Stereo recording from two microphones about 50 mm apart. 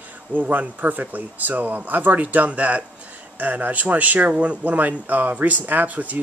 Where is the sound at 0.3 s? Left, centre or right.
Right.